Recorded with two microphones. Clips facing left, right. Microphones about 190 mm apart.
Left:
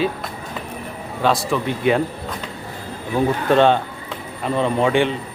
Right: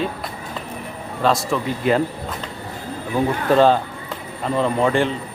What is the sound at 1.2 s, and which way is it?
Speech, centre (ahead or behind).